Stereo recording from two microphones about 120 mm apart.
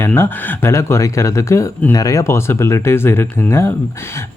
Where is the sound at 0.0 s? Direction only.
15° left (ahead or behind).